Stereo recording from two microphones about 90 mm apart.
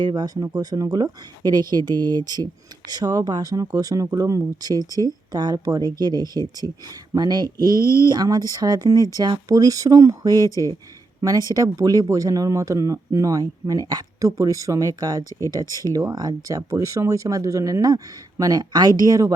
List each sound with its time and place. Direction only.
0.0 s speech: 55° right (ahead or behind)
0.4 s speech: 40° right (ahead or behind)
7.8 s speech: 30° left (ahead or behind)
8.1 s speech: 45° right (ahead or behind)